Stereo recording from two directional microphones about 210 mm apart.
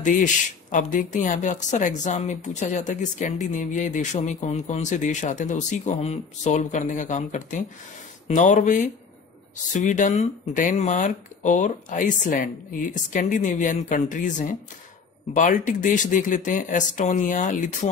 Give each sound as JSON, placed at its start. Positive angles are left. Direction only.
{"t": 0.0, "sound": "a woman's voice", "side_deg": 35}